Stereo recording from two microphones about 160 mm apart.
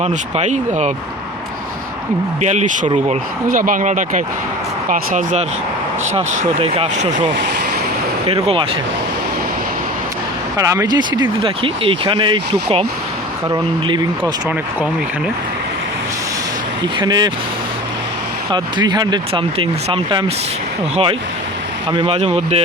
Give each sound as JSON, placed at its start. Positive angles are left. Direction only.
{"t": 0.0, "sound": "speech", "side_deg": -45}
{"t": 2.4, "sound": "speech", "side_deg": -45}
{"t": 10.6, "sound": "speech", "side_deg": -20}
{"t": 16.8, "sound": "speech", "side_deg": -25}
{"t": 18.5, "sound": "speech", "side_deg": -25}